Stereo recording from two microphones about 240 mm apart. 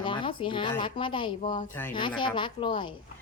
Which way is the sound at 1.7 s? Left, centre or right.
Centre.